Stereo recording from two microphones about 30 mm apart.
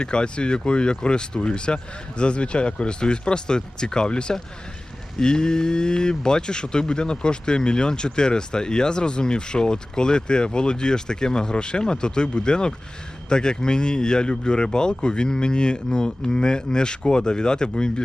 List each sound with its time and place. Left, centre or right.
0.0 s speech: left